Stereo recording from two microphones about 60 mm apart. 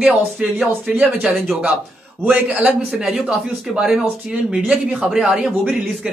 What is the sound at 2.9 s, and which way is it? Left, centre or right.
A man's voice, centre.